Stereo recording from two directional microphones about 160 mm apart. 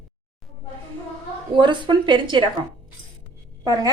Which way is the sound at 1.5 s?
30° right (ahead or behind).